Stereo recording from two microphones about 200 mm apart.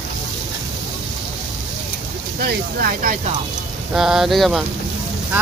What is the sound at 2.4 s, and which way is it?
Speech, 45° right (ahead or behind).